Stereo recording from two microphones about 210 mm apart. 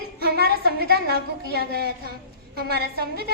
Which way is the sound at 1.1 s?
50° right (ahead or behind).